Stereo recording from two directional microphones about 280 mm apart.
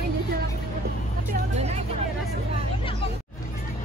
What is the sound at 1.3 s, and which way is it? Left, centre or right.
Speech, right.